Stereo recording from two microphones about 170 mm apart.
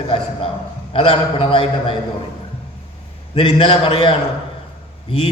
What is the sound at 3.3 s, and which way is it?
A man's voice, 30° left (ahead or behind).